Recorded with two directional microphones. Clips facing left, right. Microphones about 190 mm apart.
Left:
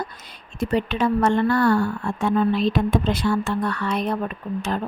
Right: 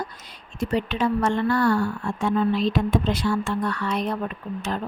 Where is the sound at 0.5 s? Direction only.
55° left (ahead or behind).